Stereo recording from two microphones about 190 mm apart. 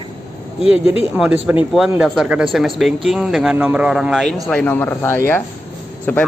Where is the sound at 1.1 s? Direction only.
5° right (ahead or behind).